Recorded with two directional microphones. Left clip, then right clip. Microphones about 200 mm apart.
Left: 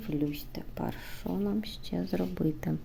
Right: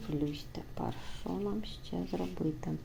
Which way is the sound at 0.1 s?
20° left (ahead or behind).